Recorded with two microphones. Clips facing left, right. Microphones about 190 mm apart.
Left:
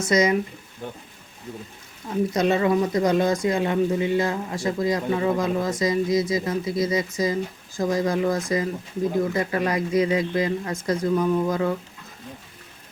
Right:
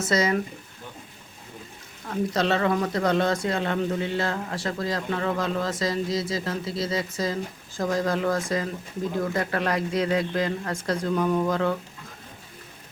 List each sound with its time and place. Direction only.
0.1 s a man's voice: 15° left (ahead or behind)
2.0 s a man's voice: 10° left (ahead or behind)